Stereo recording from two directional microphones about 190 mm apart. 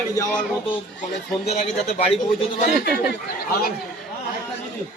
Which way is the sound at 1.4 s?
35° left (ahead or behind).